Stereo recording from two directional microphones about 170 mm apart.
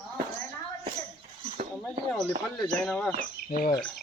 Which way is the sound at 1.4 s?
35° right (ahead or behind).